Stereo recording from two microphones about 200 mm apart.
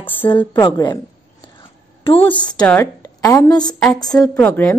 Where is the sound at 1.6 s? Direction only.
25° left (ahead or behind).